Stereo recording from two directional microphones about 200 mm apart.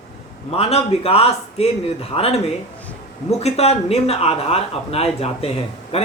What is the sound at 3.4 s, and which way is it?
Speech, 30° left (ahead or behind).